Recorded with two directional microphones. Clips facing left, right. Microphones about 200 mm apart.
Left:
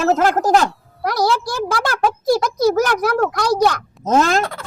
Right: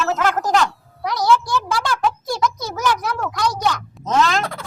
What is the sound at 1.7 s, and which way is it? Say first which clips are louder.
A child's voice: left 3 dB; 55° left (ahead or behind).